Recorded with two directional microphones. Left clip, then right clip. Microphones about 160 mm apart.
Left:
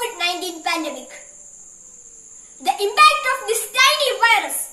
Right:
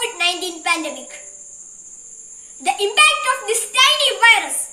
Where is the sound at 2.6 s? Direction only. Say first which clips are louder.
Left 1 dB; 10° left (ahead or behind).